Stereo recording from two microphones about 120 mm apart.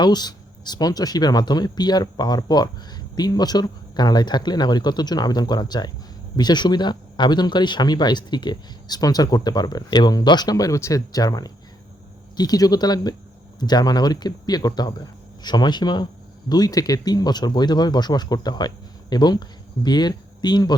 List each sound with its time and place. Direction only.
0.0 s speech: 35° left (ahead or behind)